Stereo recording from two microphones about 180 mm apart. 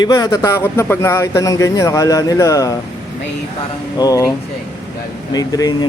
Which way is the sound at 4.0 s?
20° left (ahead or behind).